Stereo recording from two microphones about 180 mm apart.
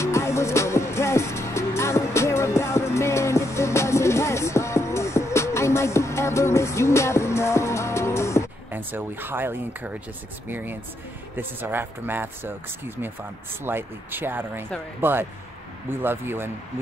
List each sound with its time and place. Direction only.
0.0 s music: 15° left (ahead or behind)
8.7 s speech: 10° right (ahead or behind)